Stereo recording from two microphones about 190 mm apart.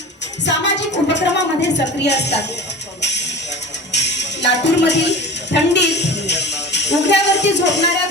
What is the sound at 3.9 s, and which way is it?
Speech, 65° left (ahead or behind).